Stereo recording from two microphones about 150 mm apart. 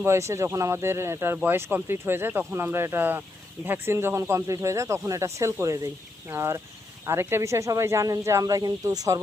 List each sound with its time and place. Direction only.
0.0 s speech: 20° right (ahead or behind)